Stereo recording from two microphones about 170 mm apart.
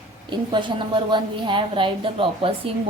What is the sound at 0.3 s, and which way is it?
A woman's voice, 30° right (ahead or behind).